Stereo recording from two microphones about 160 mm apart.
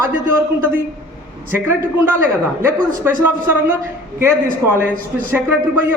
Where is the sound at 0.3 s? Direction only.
15° right (ahead or behind).